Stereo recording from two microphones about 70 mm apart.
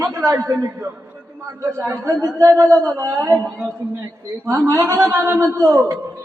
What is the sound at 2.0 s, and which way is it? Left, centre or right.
Speech, right.